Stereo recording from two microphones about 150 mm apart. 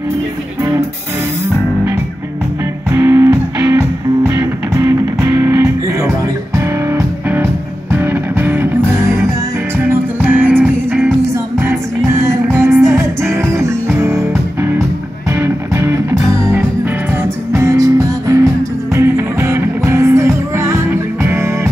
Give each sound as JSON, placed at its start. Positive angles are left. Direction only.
{"t": 2.9, "sound": "music", "side_deg": -15}